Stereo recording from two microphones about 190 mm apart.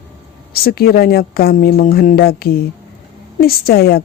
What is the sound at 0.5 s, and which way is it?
A woman's voice, 55° left (ahead or behind).